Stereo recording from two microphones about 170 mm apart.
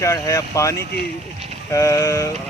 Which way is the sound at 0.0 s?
15° left (ahead or behind).